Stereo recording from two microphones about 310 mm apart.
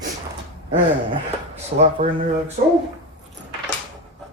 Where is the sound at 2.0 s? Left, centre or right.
Centre.